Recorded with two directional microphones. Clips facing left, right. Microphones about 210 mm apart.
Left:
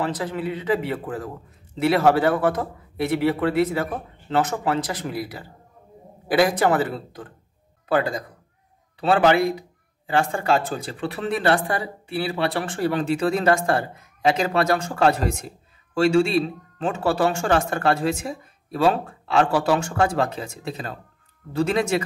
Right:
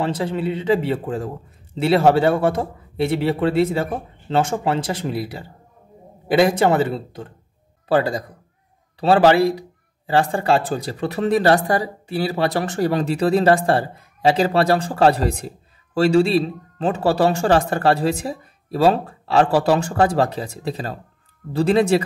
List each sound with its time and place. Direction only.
0.0 s a man's voice: 25° right (ahead or behind)